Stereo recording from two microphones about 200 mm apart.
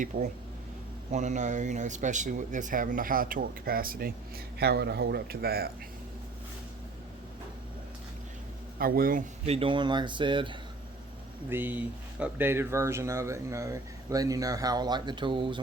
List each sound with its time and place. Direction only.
0.1 s speech: 45° right (ahead or behind)
8.8 s speech: 45° right (ahead or behind)
9.5 s speech: 25° right (ahead or behind)
11.4 s speech: 10° right (ahead or behind)